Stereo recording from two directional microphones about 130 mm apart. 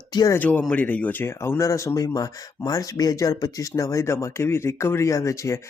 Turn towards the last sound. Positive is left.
turn(degrees=25)  # may be behind; listen again after turning